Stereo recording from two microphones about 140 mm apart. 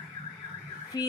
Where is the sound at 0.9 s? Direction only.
30° left (ahead or behind).